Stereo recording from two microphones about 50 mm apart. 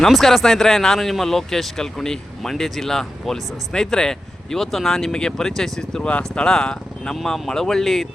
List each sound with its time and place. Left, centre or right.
0.1 s speech: centre